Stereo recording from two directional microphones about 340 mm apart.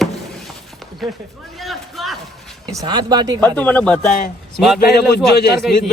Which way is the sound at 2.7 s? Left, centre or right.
Centre.